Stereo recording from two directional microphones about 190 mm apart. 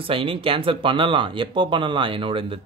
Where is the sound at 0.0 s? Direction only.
30° right (ahead or behind).